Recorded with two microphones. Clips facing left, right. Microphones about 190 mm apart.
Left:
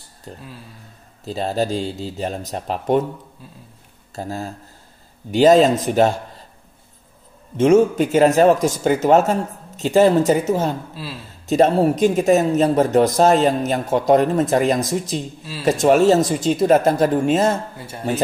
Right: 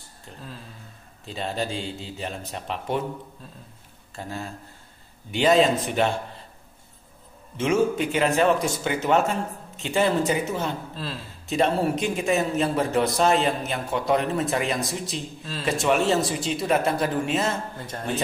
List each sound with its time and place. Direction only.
1.2 s a woman's voice: 40° left (ahead or behind)
4.1 s a woman's voice: 40° left (ahead or behind)
7.5 s a woman's voice: 40° left (ahead or behind)
17.7 s speech: 10° left (ahead or behind)